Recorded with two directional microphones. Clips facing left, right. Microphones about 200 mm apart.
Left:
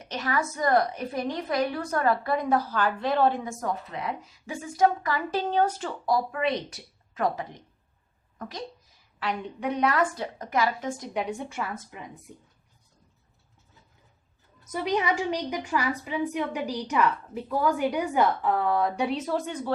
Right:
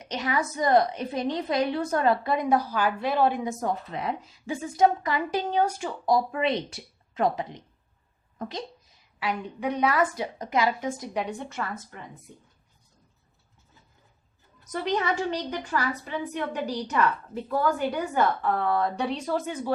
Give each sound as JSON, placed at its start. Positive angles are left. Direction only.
{"t": 0.1, "sound": "a woman's voice", "side_deg": -15}
{"t": 3.6, "sound": "a woman's voice", "side_deg": -25}
{"t": 6.3, "sound": "a woman's voice", "side_deg": -25}
{"t": 9.1, "sound": "a woman's voice", "side_deg": -5}
{"t": 11.1, "sound": "a woman's voice", "side_deg": 5}
{"t": 14.7, "sound": "a woman's voice", "side_deg": 10}